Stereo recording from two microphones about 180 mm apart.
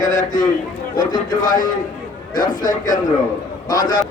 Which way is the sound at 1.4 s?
50° left (ahead or behind).